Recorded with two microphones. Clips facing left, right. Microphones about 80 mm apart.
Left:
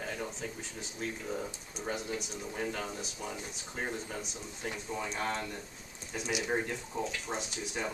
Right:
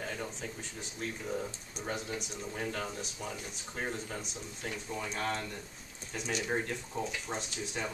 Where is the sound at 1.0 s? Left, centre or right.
Centre.